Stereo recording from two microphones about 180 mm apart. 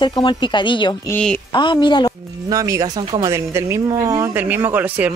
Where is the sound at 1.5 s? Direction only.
25° left (ahead or behind).